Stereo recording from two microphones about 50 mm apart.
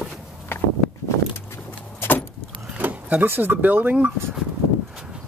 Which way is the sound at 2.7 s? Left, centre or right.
Right.